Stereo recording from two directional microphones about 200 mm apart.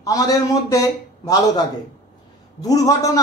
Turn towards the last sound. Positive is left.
turn(degrees=15)  # may be behind; listen again after turning